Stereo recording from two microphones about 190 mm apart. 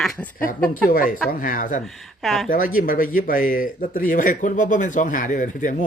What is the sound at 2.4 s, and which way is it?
Speech, 45° left (ahead or behind).